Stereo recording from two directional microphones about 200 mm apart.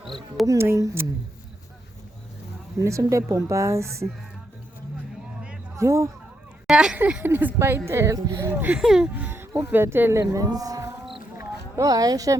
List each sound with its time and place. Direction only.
0.4 s speech: 15° right (ahead or behind)
2.8 s speech: 15° right (ahead or behind)
5.7 s speech: 15° right (ahead or behind)
6.7 s speech: 5° right (ahead or behind)
11.0 s a sound: centre (ahead or behind)
11.8 s speech: 20° right (ahead or behind)